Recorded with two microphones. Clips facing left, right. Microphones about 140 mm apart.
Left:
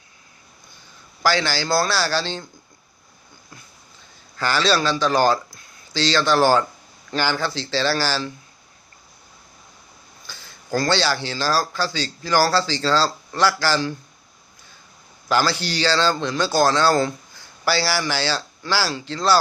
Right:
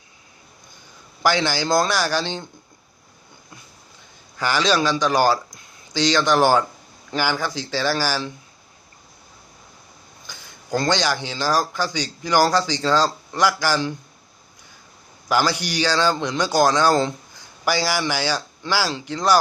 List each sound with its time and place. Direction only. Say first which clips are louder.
1.2 s speech: right 1 dB; 20° right (ahead or behind)
4.4 s speech: even; 15° right (ahead or behind)
10.2 s speech: even; 15° right (ahead or behind)
15.3 s speech: even; 15° right (ahead or behind)